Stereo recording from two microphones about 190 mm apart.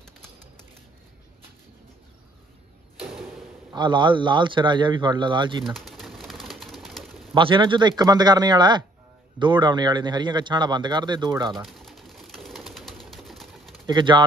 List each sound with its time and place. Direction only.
3.7 s a man's voice: 25° right (ahead or behind)
5.7 s pigeon: centre (ahead or behind)
7.3 s a man's voice: 25° right (ahead or behind)
11.5 s pigeon: centre (ahead or behind)
13.8 s a man's voice: 25° right (ahead or behind)